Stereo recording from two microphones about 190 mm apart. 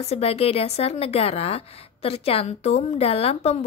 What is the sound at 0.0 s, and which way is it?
Speech, 35° left (ahead or behind).